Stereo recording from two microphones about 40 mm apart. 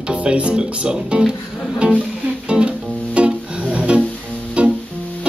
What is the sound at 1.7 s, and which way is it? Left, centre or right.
Music, right.